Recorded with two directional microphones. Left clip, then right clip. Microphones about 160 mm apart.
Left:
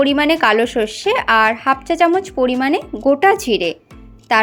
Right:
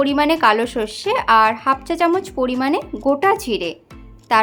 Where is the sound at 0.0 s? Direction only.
15° left (ahead or behind).